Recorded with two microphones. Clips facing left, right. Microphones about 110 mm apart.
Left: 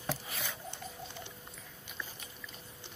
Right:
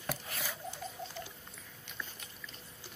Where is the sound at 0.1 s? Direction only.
Centre (ahead or behind).